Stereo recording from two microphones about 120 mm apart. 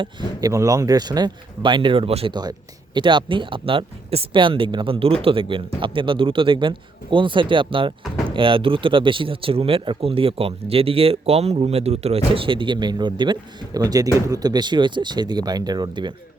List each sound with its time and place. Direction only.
0.0 s speech: 35° right (ahead or behind); by 2.3 s 55° right (ahead or behind)
2.3 s speech: 35° right (ahead or behind)